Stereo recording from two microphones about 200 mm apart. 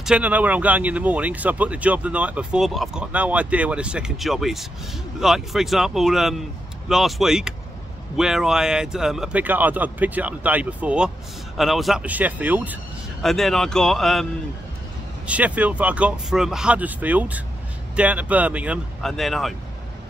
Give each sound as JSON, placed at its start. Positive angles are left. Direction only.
{"t": 0.0, "sound": "speech", "side_deg": -5}
{"t": 15.2, "sound": "speech", "side_deg": -5}